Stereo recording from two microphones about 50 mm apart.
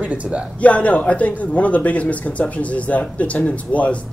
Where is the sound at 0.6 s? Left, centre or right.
Left.